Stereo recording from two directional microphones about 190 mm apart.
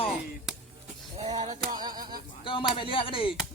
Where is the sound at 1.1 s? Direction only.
35° right (ahead or behind).